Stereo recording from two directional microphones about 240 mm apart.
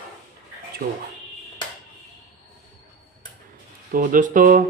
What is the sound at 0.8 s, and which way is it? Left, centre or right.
Speech, right.